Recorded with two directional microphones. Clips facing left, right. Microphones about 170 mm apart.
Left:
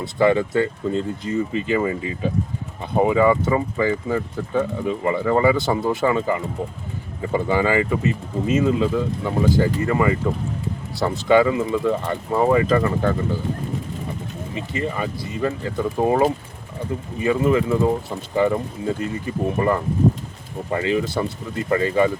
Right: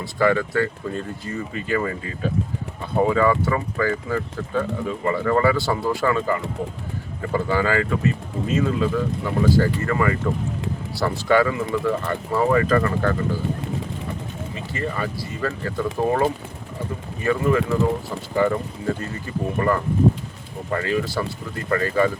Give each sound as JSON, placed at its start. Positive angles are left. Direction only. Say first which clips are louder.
{"t": 0.0, "sound": "speech", "louder": "left 2 dB", "side_deg": 20}
{"t": 14.5, "sound": "speech", "louder": "left 3 dB", "side_deg": 20}